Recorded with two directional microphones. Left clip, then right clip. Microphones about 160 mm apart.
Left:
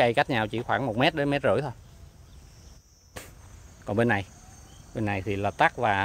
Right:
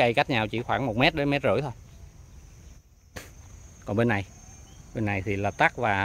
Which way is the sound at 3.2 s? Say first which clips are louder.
Even; 15° right (ahead or behind).